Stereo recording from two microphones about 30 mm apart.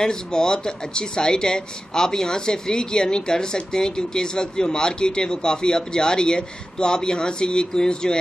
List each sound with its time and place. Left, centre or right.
0.0 s speech: left